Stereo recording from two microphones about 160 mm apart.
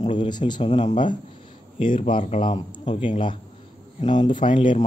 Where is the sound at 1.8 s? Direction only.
30° left (ahead or behind).